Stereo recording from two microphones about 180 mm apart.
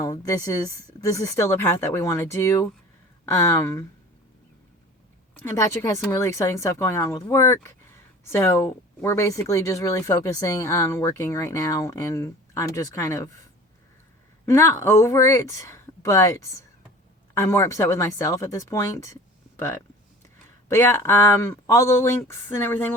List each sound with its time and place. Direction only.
0.0 s speech: 20° left (ahead or behind)
5.4 s speech: 15° left (ahead or behind)
14.4 s speech: 15° left (ahead or behind)